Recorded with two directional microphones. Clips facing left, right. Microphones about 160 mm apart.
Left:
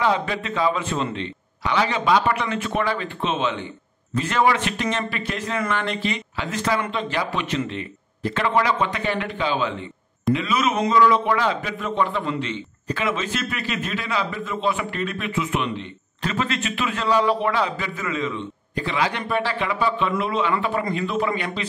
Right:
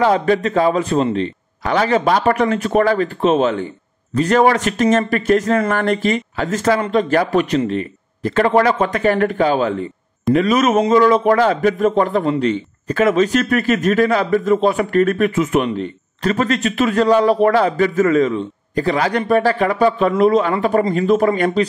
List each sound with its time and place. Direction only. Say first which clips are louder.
0.0 s a man's voice: right 8 dB; 45° right (ahead or behind)